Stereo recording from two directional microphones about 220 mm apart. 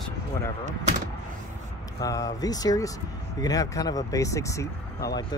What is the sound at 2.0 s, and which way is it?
Speech, 15° left (ahead or behind).